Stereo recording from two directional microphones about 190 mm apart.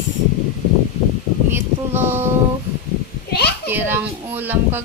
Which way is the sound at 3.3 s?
60° left (ahead or behind).